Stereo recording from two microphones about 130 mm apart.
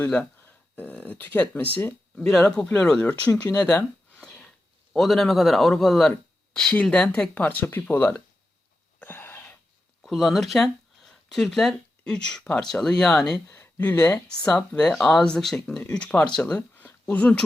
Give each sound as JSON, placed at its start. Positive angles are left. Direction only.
{"t": 0.1, "sound": "speech", "side_deg": 10}
{"t": 2.1, "sound": "speech", "side_deg": 0}
{"t": 9.0, "sound": "a sound", "side_deg": 15}
{"t": 10.0, "sound": "speech", "side_deg": 0}